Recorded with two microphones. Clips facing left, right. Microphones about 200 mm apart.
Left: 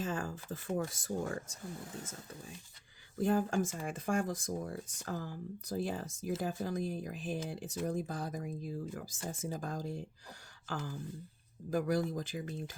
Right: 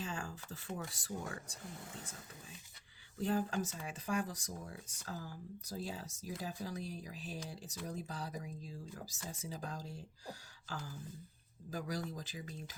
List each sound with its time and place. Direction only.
0.0 s speech: 50° left (ahead or behind)
3.2 s speech: 45° left (ahead or behind)
11.7 s speech: 55° left (ahead or behind)